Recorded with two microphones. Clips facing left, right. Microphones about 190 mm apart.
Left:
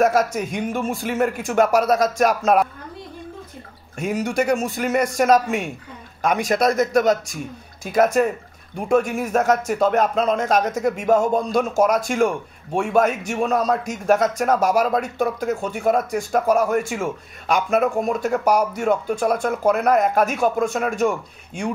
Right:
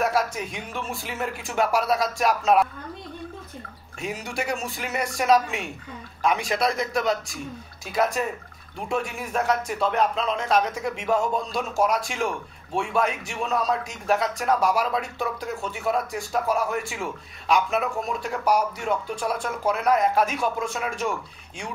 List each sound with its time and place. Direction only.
0.0 s a man's voice: 45° left (ahead or behind)
4.0 s a man's voice: 45° left (ahead or behind)